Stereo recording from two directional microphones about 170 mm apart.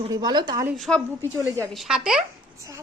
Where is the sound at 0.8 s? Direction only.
5° left (ahead or behind).